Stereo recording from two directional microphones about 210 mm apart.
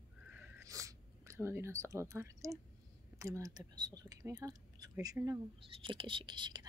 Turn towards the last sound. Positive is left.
turn(degrees=-20)  # may be behind; listen again after turning